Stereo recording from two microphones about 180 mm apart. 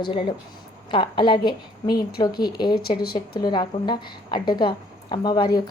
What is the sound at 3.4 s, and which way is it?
A woman's voice, 25° left (ahead or behind).